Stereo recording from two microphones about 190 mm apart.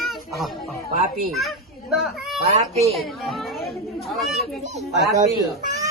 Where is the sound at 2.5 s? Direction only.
35° right (ahead or behind).